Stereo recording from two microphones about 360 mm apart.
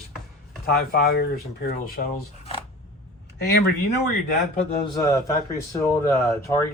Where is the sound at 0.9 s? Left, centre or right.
Left.